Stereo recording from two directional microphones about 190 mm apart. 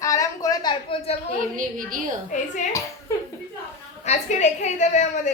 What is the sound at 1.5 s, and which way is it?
Speech, 45° right (ahead or behind).